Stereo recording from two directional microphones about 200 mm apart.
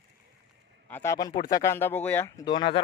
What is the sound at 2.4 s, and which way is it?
Speech, 25° left (ahead or behind).